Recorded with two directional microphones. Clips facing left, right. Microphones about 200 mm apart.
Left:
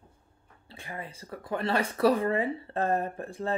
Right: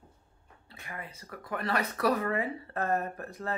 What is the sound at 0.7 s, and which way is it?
Speech, 30° left (ahead or behind).